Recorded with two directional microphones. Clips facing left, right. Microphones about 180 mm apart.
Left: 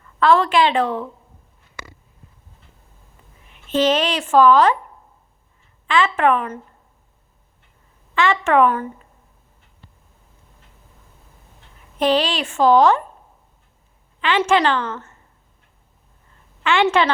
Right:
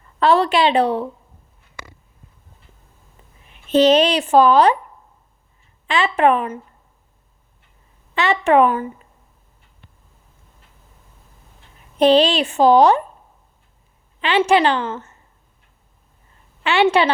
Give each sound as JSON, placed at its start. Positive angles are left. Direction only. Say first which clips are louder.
{"t": 0.0, "sound": "a woman's voice", "louder": "even", "side_deg": -20}
{"t": 3.5, "sound": "speech", "louder": "right 5 dB", "side_deg": -20}
{"t": 5.9, "sound": "speech", "louder": "right 1 dB", "side_deg": -20}
{"t": 8.1, "sound": "a woman's voice", "louder": "right 2 dB", "side_deg": -20}
{"t": 11.9, "sound": "speech", "louder": "right 5 dB", "side_deg": -20}
{"t": 14.2, "sound": "a woman's voice", "louder": "right 2 dB", "side_deg": -20}
{"t": 16.6, "sound": "a woman's voice", "louder": "right 2 dB", "side_deg": -15}